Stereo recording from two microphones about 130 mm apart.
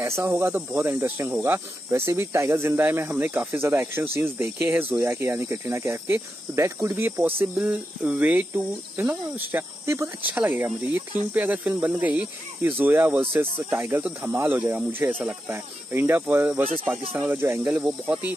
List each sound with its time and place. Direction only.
0.0 s speech: 20° right (ahead or behind)